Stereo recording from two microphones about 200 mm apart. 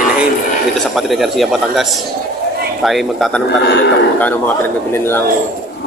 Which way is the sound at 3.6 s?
55° left (ahead or behind).